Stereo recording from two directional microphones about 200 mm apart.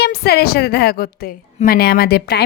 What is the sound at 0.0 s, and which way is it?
A woman's voice, 50° left (ahead or behind).